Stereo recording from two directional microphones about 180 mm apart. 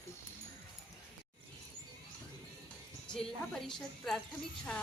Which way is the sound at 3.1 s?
5° left (ahead or behind).